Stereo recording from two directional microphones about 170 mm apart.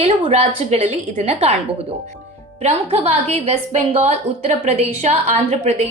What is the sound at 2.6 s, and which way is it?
A woman's voice, 40° right (ahead or behind).